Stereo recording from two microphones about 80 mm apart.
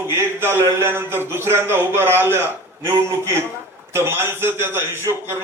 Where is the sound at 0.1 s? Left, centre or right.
Right.